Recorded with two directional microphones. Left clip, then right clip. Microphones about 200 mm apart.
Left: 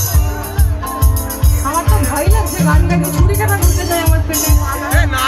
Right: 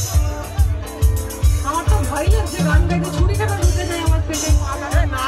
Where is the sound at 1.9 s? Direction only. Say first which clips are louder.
Left 4 dB; 15° left (ahead or behind).